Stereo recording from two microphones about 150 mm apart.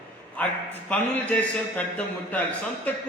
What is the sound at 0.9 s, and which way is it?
Speech, 10° left (ahead or behind).